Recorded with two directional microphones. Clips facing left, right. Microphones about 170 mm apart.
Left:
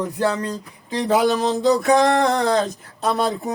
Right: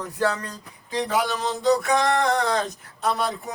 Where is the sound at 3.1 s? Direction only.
30° left (ahead or behind).